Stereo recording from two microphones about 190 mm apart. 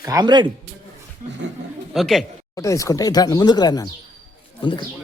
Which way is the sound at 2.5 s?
15° left (ahead or behind).